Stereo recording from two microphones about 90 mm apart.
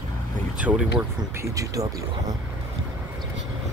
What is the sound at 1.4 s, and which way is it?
Speech, 40° right (ahead or behind).